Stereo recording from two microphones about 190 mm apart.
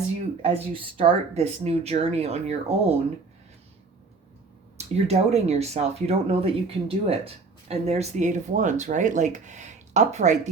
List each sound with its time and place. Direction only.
0.4 s speech: 30° right (ahead or behind)
4.8 s speech: 35° right (ahead or behind)